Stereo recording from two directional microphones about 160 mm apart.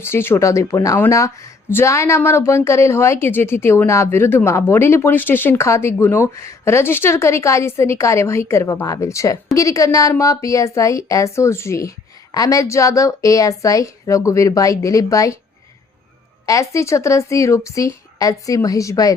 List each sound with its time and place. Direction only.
0.0 s a woman's voice: 15° left (ahead or behind)
16.5 s a woman's voice: 20° left (ahead or behind)